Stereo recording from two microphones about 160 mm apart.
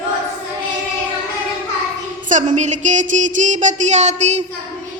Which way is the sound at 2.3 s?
50° right (ahead or behind).